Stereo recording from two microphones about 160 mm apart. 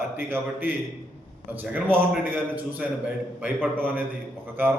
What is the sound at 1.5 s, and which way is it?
A man's voice, 10° right (ahead or behind).